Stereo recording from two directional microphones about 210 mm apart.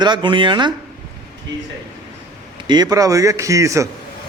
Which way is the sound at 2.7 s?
20° right (ahead or behind).